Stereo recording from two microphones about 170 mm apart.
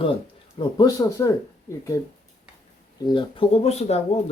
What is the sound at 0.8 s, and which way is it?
Speech, 20° left (ahead or behind).